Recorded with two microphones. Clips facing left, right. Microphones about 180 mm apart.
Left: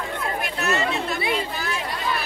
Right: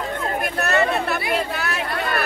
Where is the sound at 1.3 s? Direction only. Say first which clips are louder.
Right 3 dB; 70° right (ahead or behind).